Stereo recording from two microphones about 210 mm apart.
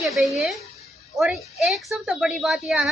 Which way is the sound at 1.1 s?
Centre (ahead or behind).